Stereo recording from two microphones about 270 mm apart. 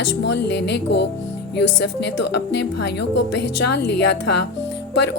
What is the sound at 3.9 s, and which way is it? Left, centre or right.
Speech, left.